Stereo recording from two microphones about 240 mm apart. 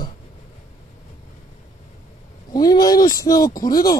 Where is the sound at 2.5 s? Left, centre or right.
Centre.